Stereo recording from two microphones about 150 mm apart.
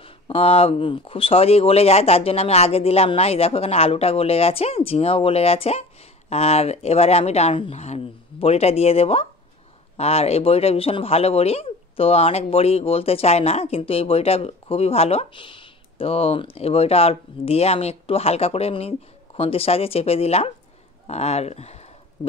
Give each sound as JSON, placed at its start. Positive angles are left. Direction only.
{"t": 0.0, "sound": "speech", "side_deg": 40}